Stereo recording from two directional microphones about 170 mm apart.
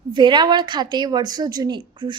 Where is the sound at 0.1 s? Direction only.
25° right (ahead or behind).